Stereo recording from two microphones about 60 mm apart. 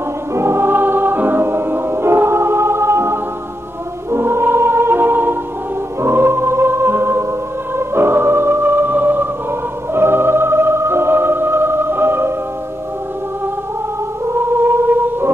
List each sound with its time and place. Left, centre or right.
0.3 s music: right
14.3 s music: right